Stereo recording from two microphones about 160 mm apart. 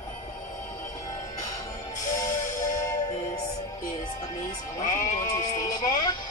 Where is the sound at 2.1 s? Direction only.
20° left (ahead or behind).